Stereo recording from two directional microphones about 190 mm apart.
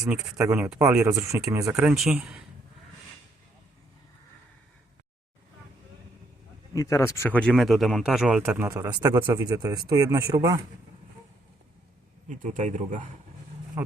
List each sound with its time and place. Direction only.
0.3 s speech: 15° right (ahead or behind)
1.7 s speech: 5° right (ahead or behind)
6.7 s speech: 15° left (ahead or behind); by 10.6 s 15° right (ahead or behind)
12.3 s a man's voice: 40° right (ahead or behind)
13.8 s speech: 10° right (ahead or behind)